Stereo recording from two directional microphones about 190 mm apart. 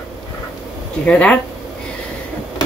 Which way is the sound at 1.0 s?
5° left (ahead or behind).